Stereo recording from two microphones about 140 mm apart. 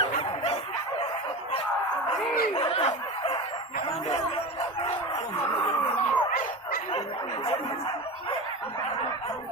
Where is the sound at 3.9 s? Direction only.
50° left (ahead or behind).